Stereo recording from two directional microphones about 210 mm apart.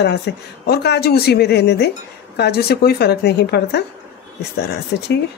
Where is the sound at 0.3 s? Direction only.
55° left (ahead or behind).